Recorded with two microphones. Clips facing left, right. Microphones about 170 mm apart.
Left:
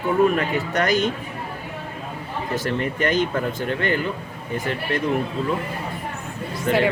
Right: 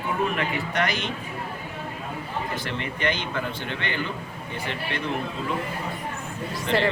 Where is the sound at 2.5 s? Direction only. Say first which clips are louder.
Left 7 dB; 45° left (ahead or behind).